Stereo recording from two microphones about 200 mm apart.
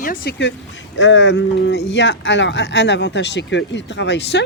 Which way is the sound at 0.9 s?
65° left (ahead or behind).